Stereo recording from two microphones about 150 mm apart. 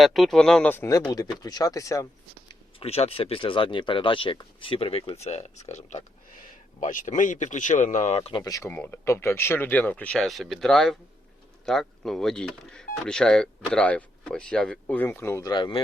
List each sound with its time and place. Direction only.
0.0 s speech: centre (ahead or behind); by 2.0 s 20° left (ahead or behind)
2.5 s speech: 40° left (ahead or behind)
8.4 s speech: 25° left (ahead or behind)
8.7 s speech: 10° left (ahead or behind)
15.5 s speech: 30° left (ahead or behind)